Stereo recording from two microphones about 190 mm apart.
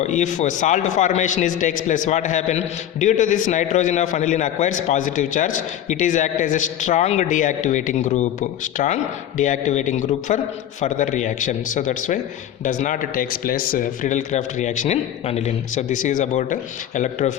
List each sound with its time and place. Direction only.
0.0 s a man's voice: 40° left (ahead or behind)